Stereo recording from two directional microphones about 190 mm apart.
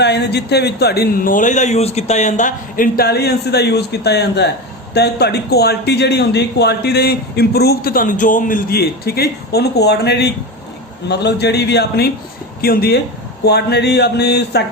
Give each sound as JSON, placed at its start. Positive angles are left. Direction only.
{"t": 0.0, "sound": "a man's voice", "side_deg": 60}